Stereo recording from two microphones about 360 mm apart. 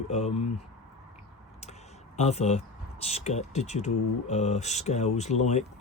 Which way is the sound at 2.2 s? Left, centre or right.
Centre.